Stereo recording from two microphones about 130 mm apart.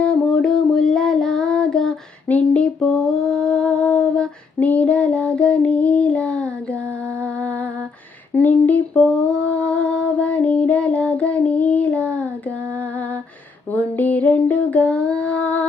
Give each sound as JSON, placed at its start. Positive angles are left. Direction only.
{"t": 0.0, "sound": "child singing", "side_deg": 5}
{"t": 8.4, "sound": "a sound", "side_deg": 10}
{"t": 13.7, "sound": "female singing", "side_deg": 10}